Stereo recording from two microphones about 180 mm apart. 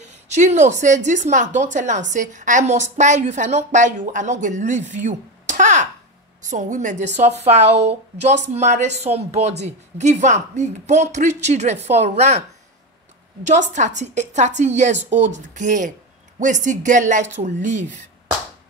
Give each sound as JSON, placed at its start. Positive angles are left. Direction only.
{"t": 0.0, "sound": "a woman's voice", "side_deg": -40}
{"t": 4.9, "sound": "a sound", "side_deg": -45}
{"t": 6.5, "sound": "a woman's voice", "side_deg": -45}